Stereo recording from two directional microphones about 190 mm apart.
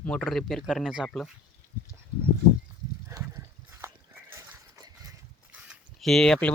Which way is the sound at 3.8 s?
15° right (ahead or behind).